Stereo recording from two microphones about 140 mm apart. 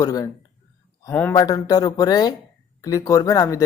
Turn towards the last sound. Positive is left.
turn(degrees=25)  # may be behind; listen again after turning